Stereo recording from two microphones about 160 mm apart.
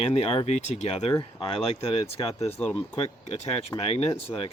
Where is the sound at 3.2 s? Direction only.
45° left (ahead or behind).